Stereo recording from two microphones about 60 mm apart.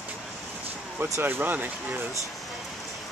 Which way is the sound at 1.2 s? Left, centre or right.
Right.